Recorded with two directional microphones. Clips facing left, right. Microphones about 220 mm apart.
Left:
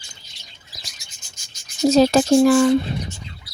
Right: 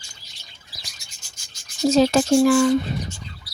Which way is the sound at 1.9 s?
40° left (ahead or behind).